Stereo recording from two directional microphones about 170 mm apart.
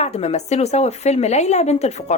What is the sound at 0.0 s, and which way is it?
A woman's voice, 40° left (ahead or behind).